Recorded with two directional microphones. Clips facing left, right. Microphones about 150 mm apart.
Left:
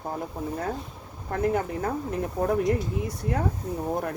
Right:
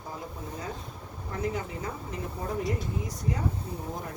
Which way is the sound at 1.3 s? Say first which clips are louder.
Left 7 dB; 55° left (ahead or behind).